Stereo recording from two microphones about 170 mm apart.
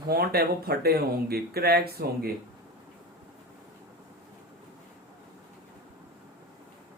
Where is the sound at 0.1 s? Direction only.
65° right (ahead or behind).